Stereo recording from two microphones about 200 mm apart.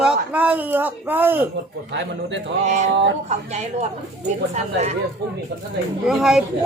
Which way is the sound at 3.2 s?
35° right (ahead or behind).